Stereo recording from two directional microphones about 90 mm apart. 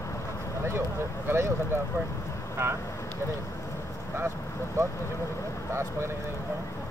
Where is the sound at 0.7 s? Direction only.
30° right (ahead or behind).